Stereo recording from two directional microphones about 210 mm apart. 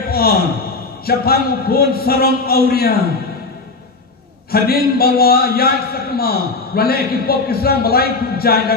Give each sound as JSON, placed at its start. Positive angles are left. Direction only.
{"t": 0.1, "sound": "a man's voice", "side_deg": 45}
{"t": 4.5, "sound": "a man's voice", "side_deg": 45}